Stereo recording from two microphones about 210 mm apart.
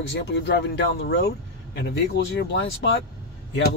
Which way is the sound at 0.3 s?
55° left (ahead or behind).